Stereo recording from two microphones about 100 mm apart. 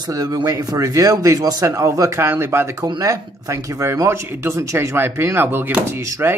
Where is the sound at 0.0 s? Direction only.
40° right (ahead or behind).